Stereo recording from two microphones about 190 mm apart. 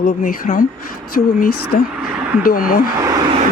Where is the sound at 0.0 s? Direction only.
50° left (ahead or behind).